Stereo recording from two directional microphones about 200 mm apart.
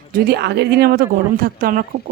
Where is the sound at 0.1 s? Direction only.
50° right (ahead or behind).